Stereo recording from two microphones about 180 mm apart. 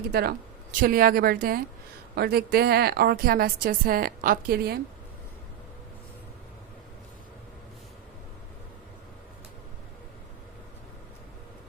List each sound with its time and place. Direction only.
0.1 s a woman's voice: 60° right (ahead or behind)